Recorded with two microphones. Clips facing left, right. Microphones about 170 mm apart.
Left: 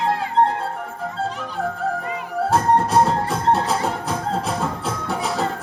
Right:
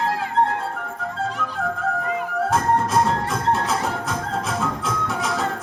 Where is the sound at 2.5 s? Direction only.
35° left (ahead or behind).